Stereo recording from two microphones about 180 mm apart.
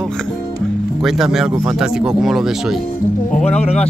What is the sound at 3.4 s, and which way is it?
Speech, 35° left (ahead or behind).